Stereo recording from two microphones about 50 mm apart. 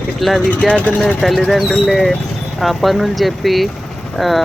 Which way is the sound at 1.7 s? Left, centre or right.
Centre.